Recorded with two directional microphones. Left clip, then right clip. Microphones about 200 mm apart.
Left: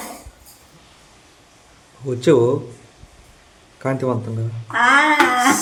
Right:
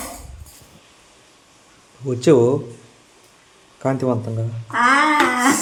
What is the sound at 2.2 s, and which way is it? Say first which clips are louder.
Speech: right 1 dB; 15° right (ahead or behind).